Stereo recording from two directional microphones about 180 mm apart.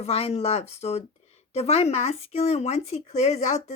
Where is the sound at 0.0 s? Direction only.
35° left (ahead or behind).